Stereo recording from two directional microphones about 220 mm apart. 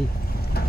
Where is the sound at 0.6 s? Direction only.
45° left (ahead or behind).